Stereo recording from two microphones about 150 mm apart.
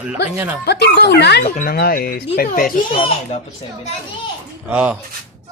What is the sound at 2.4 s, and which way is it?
Speech, 70° left (ahead or behind).